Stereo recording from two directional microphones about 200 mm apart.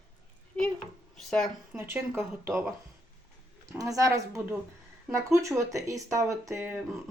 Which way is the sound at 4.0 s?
15° right (ahead or behind).